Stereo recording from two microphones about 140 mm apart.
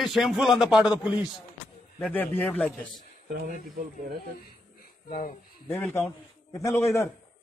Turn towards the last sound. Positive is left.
turn(degrees=20)  # may be behind; listen again after turning